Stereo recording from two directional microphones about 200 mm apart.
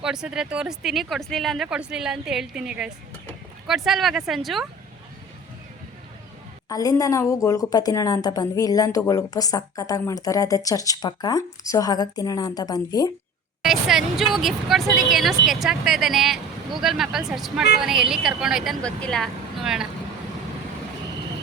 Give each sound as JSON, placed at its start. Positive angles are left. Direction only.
{"t": 0.0, "sound": "speech", "side_deg": -5}
{"t": 6.7, "sound": "a woman's voice", "side_deg": 15}
{"t": 13.7, "sound": "speech", "side_deg": 0}